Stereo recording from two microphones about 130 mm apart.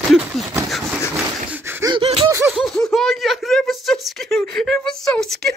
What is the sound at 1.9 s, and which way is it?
Gasp, 45° right (ahead or behind).